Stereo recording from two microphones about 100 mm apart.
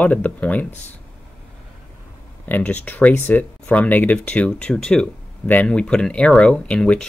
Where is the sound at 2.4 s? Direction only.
15° left (ahead or behind).